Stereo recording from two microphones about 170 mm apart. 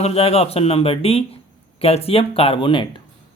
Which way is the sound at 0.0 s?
35° left (ahead or behind).